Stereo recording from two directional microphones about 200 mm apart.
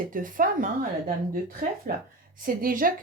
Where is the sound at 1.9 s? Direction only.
45° right (ahead or behind).